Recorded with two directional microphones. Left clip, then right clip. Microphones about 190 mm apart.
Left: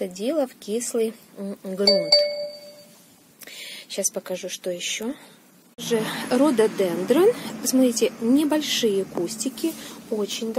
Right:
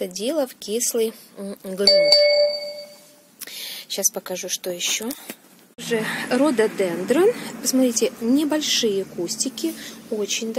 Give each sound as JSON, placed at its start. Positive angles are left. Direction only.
{"t": 0.0, "sound": "speech", "side_deg": 0}
{"t": 1.9, "sound": "speech", "side_deg": -45}
{"t": 3.5, "sound": "speech", "side_deg": 0}